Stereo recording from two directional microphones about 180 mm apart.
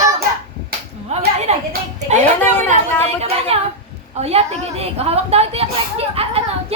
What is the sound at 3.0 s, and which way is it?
A woman's voice, 35° right (ahead or behind).